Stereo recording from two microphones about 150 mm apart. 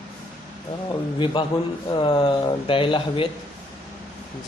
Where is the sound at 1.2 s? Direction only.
30° left (ahead or behind).